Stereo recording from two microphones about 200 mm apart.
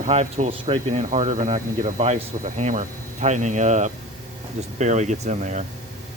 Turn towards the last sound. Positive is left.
turn(degrees=-35)  # may be behind; listen again after turning